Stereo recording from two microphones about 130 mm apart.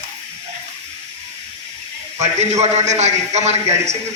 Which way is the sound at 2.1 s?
60° right (ahead or behind).